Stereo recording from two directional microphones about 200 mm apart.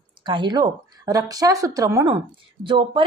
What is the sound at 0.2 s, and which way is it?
A woman's voice, 25° right (ahead or behind).